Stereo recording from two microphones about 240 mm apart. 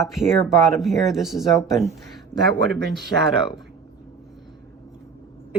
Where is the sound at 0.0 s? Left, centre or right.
Centre.